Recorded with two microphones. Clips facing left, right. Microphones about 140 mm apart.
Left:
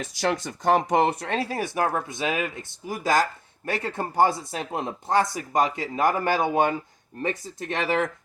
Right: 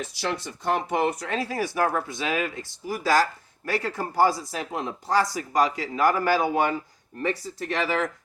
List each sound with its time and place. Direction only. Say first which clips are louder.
0.2 s speech: left 6 dB; 45° left (ahead or behind); by 8.0 s 25° left (ahead or behind)